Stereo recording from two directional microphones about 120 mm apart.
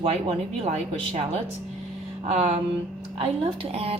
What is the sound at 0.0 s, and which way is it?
Speech, 60° right (ahead or behind).